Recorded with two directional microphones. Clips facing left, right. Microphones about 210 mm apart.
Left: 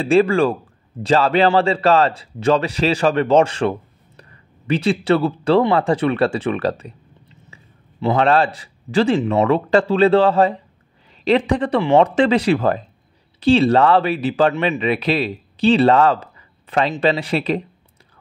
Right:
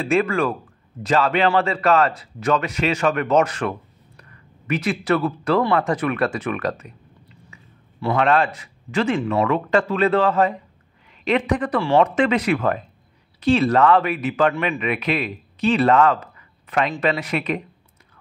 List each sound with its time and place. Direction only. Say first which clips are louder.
0.0 s a man's voice: left 5 dB; 30° left (ahead or behind)